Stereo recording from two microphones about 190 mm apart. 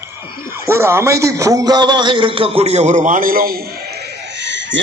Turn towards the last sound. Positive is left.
turn(degrees=-70)  # may be behind; listen again after turning